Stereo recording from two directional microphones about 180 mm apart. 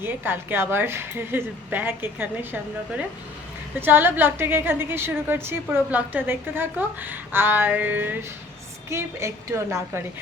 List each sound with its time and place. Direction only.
0.0 s a woman's voice: 10° right (ahead or behind)